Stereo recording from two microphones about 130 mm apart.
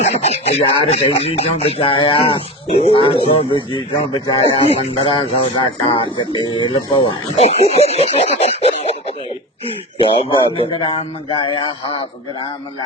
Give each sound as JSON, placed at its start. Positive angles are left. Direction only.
{"t": 0.0, "sound": "speech", "side_deg": 55}
{"t": 4.9, "sound": "speech", "side_deg": 35}
{"t": 8.1, "sound": "a sound", "side_deg": 50}
{"t": 9.6, "sound": "speech", "side_deg": 40}